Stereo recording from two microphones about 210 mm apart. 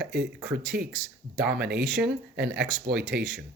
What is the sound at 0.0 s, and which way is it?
Speech, 50° right (ahead or behind).